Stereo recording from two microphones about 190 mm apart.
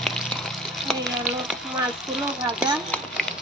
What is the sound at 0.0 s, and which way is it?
Frying, centre (ahead or behind).